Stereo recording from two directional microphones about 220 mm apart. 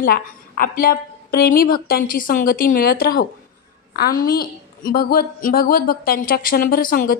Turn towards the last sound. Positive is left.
turn(degrees=40)  # may be behind; listen again after turning